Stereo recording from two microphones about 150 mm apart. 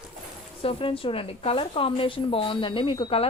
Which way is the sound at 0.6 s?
35° left (ahead or behind).